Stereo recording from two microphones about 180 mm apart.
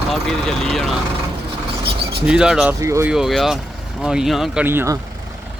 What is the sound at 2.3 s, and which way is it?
Speech, 5° right (ahead or behind).